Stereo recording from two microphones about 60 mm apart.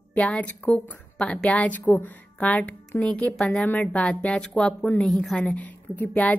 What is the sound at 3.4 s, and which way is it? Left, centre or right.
Speech, centre.